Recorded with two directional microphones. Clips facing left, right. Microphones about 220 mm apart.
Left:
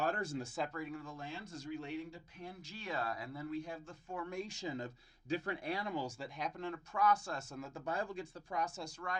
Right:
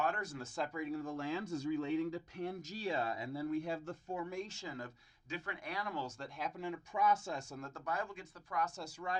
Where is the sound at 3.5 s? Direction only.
65° right (ahead or behind).